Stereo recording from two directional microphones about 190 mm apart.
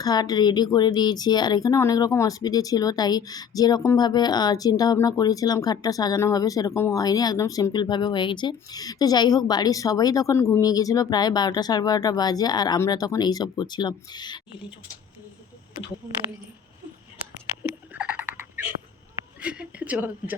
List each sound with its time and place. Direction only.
0.0 s speech: 20° left (ahead or behind)
17.6 s frog: 10° right (ahead or behind)
19.4 s a sound: 5° right (ahead or behind)